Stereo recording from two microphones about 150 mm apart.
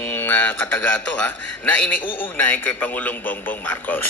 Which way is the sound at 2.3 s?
10° left (ahead or behind).